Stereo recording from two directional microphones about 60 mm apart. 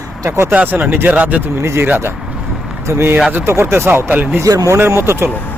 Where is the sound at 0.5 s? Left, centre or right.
Right.